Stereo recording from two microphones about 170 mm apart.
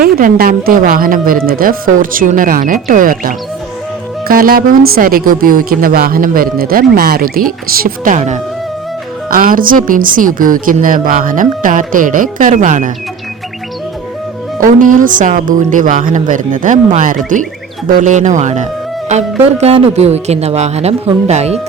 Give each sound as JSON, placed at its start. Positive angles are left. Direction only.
{"t": 0.0, "sound": "speech", "side_deg": -55}
{"t": 8.1, "sound": "speech", "side_deg": -40}
{"t": 9.3, "sound": "a woman's voice", "side_deg": -55}
{"t": 14.6, "sound": "a woman's voice", "side_deg": -50}